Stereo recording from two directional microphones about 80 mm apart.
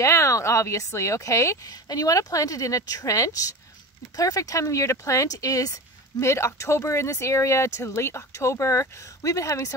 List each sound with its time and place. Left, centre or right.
0.0 s a woman's voice: left